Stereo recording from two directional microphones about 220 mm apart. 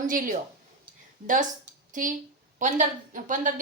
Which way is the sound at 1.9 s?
35° right (ahead or behind).